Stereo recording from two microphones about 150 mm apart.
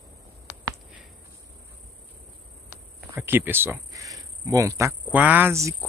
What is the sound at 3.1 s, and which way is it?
Speech, 15° right (ahead or behind).